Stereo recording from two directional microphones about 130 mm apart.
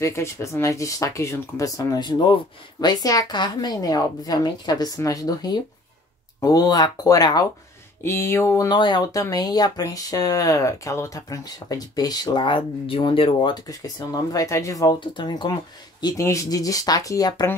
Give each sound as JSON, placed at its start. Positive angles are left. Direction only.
{"t": 0.0, "sound": "speech", "side_deg": 20}
{"t": 8.0, "sound": "speech", "side_deg": 20}
{"t": 8.7, "sound": "speech", "side_deg": 35}